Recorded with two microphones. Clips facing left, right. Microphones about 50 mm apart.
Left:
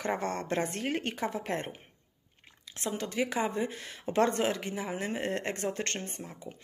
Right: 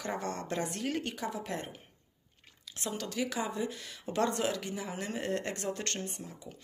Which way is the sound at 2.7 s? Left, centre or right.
Left.